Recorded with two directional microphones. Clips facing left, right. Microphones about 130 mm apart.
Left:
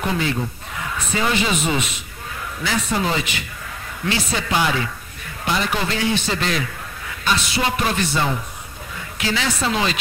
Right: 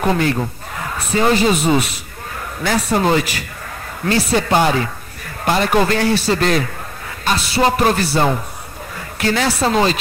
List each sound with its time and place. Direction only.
0.0 s a man's voice: 50° right (ahead or behind)
6.1 s a man's voice: 40° right (ahead or behind)
8.9 s a sound: 45° right (ahead or behind)
9.5 s speech: 35° right (ahead or behind)